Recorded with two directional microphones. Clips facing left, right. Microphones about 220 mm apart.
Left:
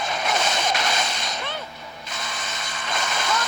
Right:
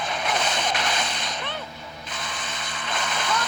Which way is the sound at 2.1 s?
45° left (ahead or behind).